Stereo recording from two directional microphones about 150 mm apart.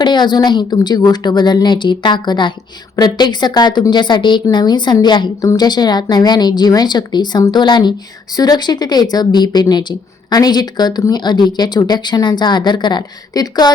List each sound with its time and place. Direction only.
0.0 s a woman's voice: 30° left (ahead or behind)